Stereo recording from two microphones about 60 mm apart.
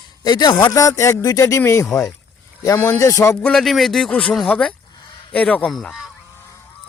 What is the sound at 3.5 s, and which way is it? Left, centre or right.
Goose, centre.